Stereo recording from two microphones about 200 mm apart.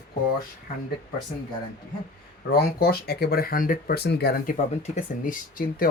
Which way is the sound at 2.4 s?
50° left (ahead or behind).